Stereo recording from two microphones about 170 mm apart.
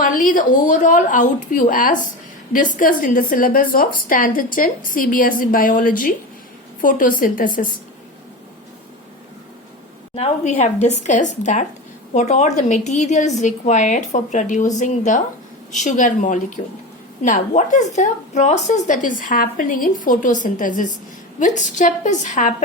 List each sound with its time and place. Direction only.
0.0 s a woman's voice: 50° left (ahead or behind)
10.2 s a woman's voice: 40° left (ahead or behind)